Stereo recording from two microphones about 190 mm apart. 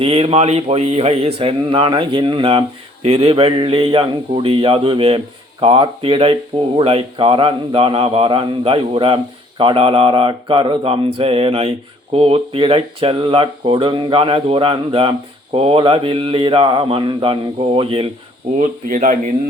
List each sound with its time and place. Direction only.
0.0 s a man's voice: 30° right (ahead or behind)